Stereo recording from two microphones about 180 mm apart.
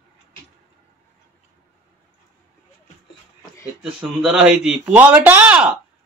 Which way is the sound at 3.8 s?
Centre (ahead or behind).